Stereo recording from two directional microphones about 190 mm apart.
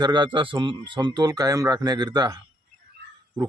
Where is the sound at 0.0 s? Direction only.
25° right (ahead or behind).